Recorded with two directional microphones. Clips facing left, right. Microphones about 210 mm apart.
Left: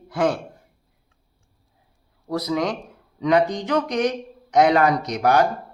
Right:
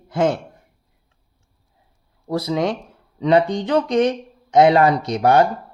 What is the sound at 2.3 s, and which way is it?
Speech, 25° right (ahead or behind).